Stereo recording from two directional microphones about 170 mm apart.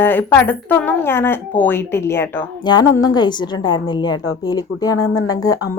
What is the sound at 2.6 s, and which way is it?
A woman's voice, 25° left (ahead or behind).